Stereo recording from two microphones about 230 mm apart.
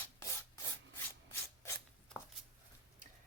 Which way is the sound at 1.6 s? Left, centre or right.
Centre.